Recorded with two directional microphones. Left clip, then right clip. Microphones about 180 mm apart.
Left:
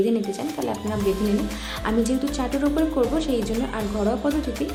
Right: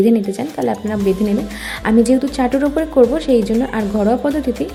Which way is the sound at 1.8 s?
30° right (ahead or behind).